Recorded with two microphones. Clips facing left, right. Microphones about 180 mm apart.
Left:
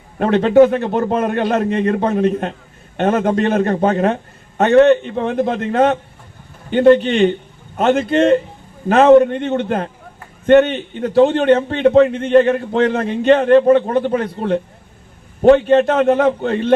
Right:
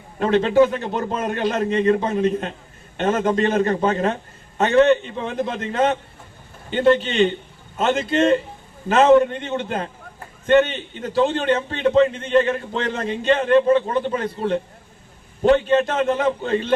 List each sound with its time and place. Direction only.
0.3 s a man's voice: 55° left (ahead or behind)
6.7 s a man's voice: 50° left (ahead or behind)